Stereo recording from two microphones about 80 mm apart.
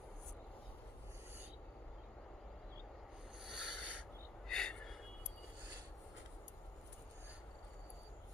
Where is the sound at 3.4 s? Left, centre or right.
Centre.